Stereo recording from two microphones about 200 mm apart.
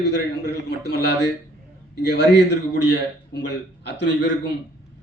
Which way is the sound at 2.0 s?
60° left (ahead or behind).